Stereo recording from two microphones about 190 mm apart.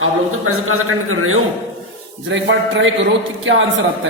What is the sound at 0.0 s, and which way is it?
A man's voice, 90° right.